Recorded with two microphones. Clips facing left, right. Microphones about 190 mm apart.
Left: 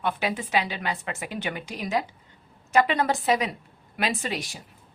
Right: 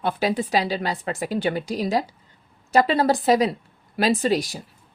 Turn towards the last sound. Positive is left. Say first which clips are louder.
# right 9 dB
turn(degrees=-40)  # may be behind; listen again after turning